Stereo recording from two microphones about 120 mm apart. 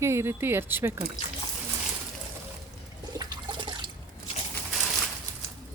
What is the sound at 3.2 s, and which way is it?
Water, 40° right (ahead or behind).